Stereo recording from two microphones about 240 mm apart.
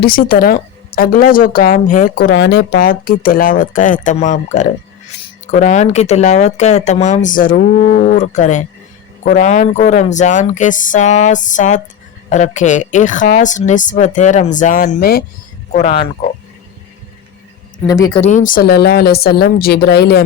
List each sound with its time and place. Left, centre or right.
0.0 s speech: left
17.8 s speech: centre
18.2 s speech: left